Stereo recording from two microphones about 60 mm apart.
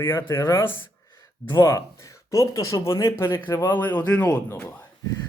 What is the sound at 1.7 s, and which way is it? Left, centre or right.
Speech, left.